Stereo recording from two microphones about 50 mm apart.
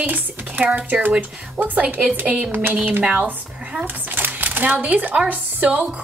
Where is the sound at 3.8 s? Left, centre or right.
Right.